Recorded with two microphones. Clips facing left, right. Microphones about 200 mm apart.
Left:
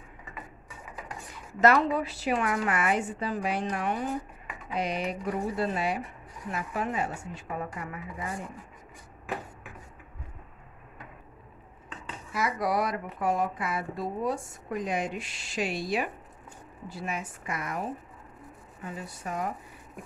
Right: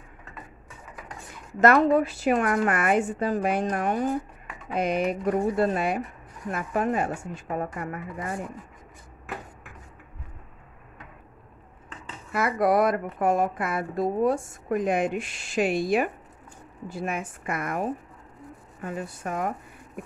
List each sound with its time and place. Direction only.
1.6 s speech: 50° right (ahead or behind)
12.3 s speech: 55° right (ahead or behind)